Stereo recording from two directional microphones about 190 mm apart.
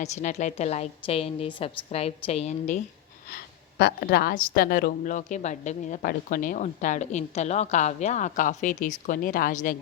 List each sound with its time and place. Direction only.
0.0 s a woman's voice: 40° left (ahead or behind)
3.2 s a woman's voice: 55° left (ahead or behind)